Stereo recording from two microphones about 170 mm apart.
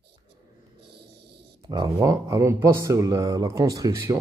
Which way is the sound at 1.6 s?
20° right (ahead or behind).